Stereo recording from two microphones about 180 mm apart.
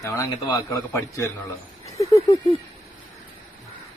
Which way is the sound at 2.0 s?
20° left (ahead or behind).